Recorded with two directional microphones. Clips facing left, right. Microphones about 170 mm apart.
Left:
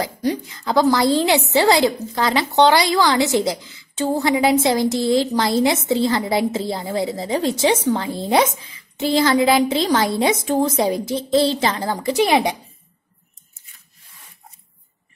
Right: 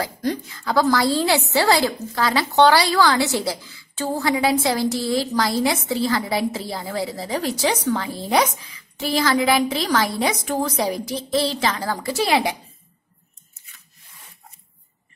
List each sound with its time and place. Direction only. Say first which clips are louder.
0.0 s a woman's voice: left 2 dB; 15° left (ahead or behind)